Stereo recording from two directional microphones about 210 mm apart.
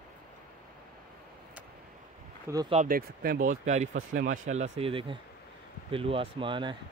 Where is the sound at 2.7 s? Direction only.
40° right (ahead or behind); by 6.7 s 25° right (ahead or behind).